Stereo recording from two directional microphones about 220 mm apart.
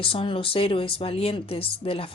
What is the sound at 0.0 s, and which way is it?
Speech, 25° left (ahead or behind).